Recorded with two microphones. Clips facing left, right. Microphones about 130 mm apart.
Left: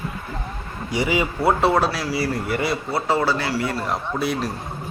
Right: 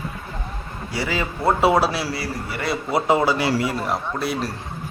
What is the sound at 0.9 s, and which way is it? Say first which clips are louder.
Speech: left 4 dB; 15° left (ahead or behind).